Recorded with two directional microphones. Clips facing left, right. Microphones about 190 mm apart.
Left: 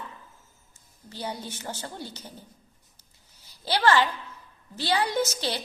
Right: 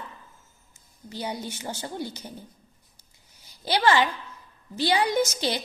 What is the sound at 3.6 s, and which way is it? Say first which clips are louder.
A woman's voice: right 1 dB; 15° right (ahead or behind).